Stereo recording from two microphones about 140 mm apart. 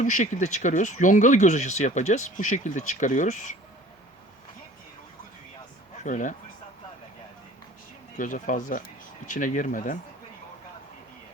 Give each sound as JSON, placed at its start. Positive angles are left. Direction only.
{"t": 0.0, "sound": "speech", "side_deg": 65}
{"t": 6.0, "sound": "speech", "side_deg": 65}
{"t": 8.1, "sound": "speech", "side_deg": 70}